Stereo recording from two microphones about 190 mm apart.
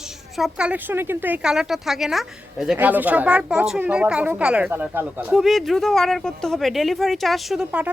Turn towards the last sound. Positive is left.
turn(degrees=-5)  # may be behind; listen again after turning